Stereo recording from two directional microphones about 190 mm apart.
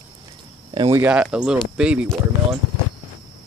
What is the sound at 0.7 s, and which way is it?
Speech, 25° right (ahead or behind).